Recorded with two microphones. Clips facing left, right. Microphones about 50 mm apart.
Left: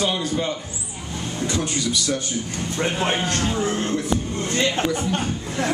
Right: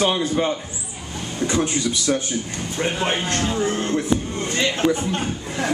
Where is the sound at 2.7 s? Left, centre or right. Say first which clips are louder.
Even; centre.